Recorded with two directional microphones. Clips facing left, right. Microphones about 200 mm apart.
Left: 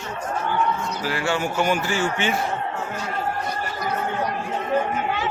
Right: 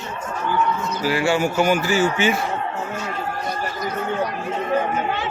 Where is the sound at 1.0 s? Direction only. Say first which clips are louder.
Right 6 dB; 10° right (ahead or behind).